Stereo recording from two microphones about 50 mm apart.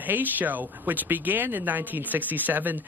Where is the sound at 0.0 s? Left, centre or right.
Right.